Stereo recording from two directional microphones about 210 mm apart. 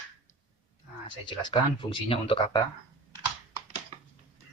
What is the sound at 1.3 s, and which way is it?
Speech, 25° left (ahead or behind).